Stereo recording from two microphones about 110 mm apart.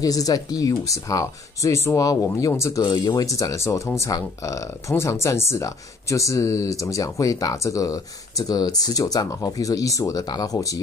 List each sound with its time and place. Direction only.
0.0 s speech: 35° left (ahead or behind)
2.8 s speech: 40° left (ahead or behind)